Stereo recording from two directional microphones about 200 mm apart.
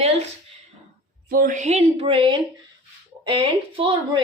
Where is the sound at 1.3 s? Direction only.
45° right (ahead or behind).